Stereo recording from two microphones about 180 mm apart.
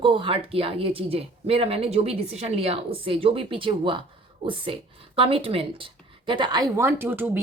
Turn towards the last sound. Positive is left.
turn(degrees=-10)  # may be behind; listen again after turning